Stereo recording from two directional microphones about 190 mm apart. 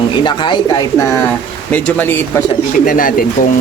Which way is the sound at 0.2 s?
25° left (ahead or behind).